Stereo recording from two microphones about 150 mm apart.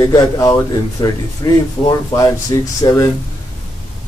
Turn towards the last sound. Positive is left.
turn(degrees=25)  # may be behind; listen again after turning